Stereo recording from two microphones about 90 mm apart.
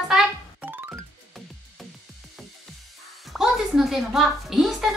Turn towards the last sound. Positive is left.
turn(degrees=-5)  # may be behind; listen again after turning